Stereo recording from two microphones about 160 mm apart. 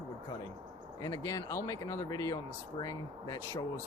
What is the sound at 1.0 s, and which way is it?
Speech, 20° left (ahead or behind).